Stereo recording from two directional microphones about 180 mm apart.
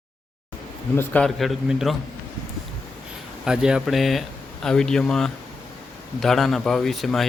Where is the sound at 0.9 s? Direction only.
5° left (ahead or behind).